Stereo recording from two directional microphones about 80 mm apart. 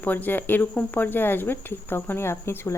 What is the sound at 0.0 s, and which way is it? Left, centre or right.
Speech, left.